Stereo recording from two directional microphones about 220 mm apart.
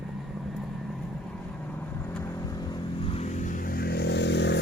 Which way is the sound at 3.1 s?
30° left (ahead or behind).